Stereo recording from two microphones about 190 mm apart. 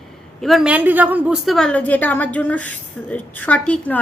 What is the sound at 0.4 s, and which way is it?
A woman's voice, centre (ahead or behind).